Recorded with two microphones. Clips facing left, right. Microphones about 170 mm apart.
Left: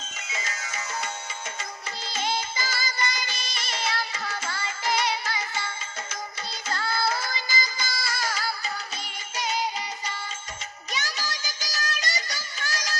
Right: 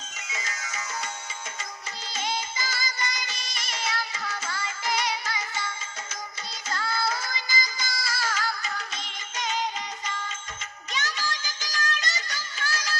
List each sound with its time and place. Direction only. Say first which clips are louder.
2.0 s music: left 2 dB; 30° left (ahead or behind)
8.1 s music of bollywood: right 1 dB; 15° left (ahead or behind)
11.0 s music: right 2 dB; 10° left (ahead or behind)